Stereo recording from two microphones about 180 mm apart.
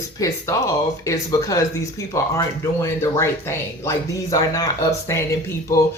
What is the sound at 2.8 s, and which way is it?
Speech, 15° left (ahead or behind).